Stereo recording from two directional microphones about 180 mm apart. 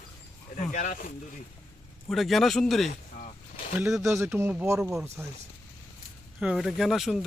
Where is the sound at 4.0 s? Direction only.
15° right (ahead or behind).